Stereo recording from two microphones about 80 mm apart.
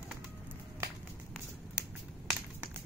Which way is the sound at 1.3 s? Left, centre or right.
Centre.